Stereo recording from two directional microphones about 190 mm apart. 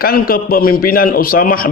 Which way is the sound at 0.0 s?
50° left (ahead or behind).